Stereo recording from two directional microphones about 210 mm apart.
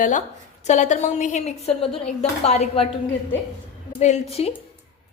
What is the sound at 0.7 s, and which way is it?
A woman's voice, 35° left (ahead or behind).